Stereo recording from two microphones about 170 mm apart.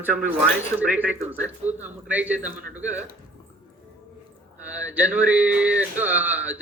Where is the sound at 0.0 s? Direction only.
10° right (ahead or behind).